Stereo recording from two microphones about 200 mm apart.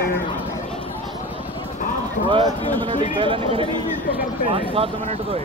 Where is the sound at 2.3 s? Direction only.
25° right (ahead or behind).